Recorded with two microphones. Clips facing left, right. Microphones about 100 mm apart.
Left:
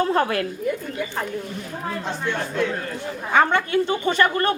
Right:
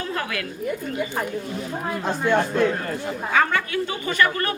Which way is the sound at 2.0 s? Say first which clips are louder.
Right 8 dB; 45° right (ahead or behind).